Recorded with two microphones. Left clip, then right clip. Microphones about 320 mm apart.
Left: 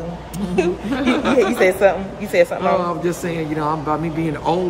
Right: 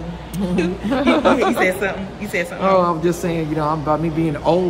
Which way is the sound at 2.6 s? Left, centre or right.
Centre.